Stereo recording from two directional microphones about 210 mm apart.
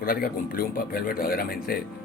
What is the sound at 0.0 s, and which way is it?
Speech, 45° left (ahead or behind).